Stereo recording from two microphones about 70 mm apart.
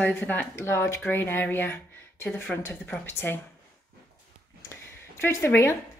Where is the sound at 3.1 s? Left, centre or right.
Left.